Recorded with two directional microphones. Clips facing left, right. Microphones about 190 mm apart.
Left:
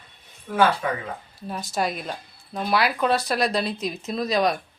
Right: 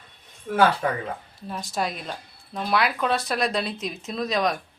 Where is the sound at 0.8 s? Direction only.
40° right (ahead or behind).